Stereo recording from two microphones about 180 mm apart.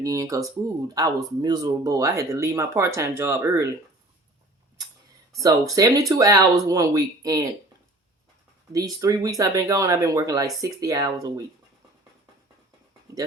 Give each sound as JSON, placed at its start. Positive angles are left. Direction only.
{"t": 0.0, "sound": "speech", "side_deg": -20}
{"t": 5.4, "sound": "speech", "side_deg": -20}
{"t": 8.7, "sound": "speech", "side_deg": -20}